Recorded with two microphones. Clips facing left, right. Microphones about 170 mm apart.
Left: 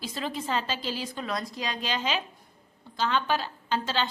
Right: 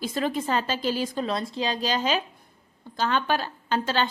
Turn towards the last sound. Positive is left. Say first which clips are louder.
# right 3 dB
turn(degrees=-50)  # may be behind; listen again after turning